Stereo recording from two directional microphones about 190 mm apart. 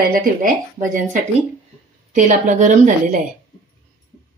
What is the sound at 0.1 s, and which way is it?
Speech, 45° right (ahead or behind).